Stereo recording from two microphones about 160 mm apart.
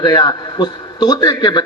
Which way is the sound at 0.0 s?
25° left (ahead or behind).